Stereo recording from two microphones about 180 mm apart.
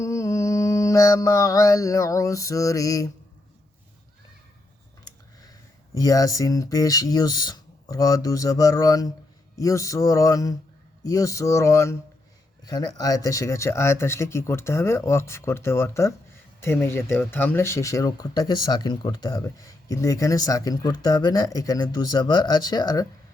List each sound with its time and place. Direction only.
0.0 s mantra: 20° left (ahead or behind)
6.0 s speech: 20° left (ahead or behind)